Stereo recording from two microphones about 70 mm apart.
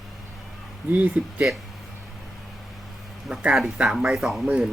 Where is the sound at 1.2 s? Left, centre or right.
Right.